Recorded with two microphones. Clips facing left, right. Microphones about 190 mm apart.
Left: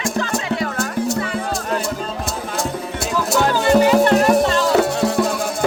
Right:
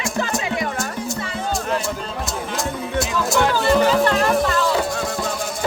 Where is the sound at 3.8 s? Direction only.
20° left (ahead or behind).